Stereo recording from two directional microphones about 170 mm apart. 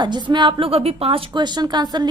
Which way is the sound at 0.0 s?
25° right (ahead or behind).